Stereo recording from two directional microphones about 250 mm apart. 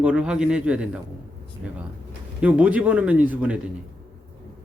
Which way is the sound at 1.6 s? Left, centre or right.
Centre.